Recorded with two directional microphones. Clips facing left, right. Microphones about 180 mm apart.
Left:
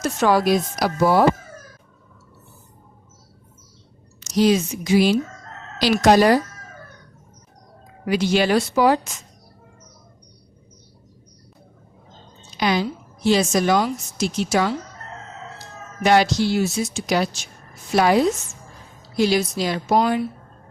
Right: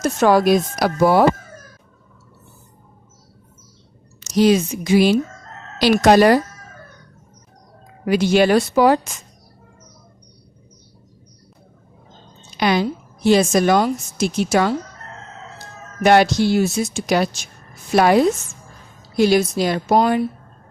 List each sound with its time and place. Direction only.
0.0 s speech: 45° right (ahead or behind)
4.3 s speech: 55° right (ahead or behind)
8.0 s speech: 50° right (ahead or behind)
12.5 s a woman's voice: 60° right (ahead or behind)
16.0 s speech: 55° right (ahead or behind)